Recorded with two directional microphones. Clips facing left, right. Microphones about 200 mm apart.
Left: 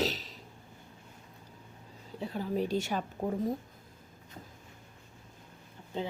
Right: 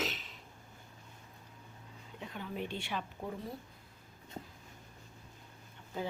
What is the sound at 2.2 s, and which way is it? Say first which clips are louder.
Speech: left 8 dB; 35° left (ahead or behind).